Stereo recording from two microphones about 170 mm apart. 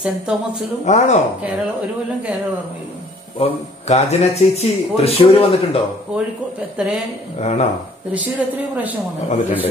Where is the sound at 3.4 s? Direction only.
40° left (ahead or behind).